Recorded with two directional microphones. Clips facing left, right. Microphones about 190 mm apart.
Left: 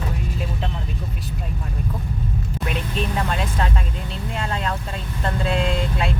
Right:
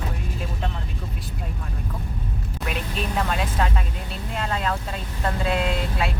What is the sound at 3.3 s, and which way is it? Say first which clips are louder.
Speech: left 1 dB; 5° right (ahead or behind).